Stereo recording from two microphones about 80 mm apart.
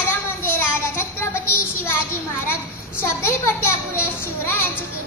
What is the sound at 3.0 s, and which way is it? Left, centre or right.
A child's voice, left.